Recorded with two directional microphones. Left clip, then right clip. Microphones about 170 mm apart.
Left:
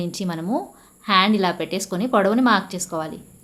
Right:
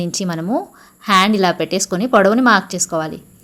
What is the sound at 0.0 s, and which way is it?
A woman's voice, 30° right (ahead or behind).